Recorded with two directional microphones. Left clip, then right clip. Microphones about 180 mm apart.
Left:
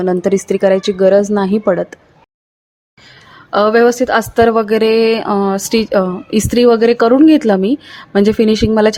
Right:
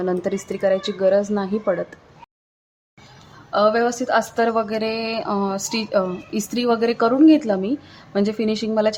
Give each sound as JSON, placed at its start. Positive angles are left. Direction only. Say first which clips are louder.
{"t": 0.0, "sound": "speech", "louder": "left 9 dB", "side_deg": 30}
{"t": 3.5, "sound": "speech", "louder": "left 8 dB", "side_deg": 40}